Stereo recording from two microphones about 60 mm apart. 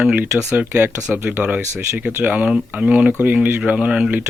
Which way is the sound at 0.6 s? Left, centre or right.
Right.